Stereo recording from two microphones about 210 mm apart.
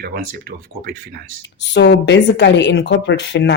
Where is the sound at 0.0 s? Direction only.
45° right (ahead or behind).